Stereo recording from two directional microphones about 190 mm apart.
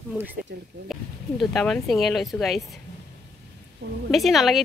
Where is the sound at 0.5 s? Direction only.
65° right (ahead or behind).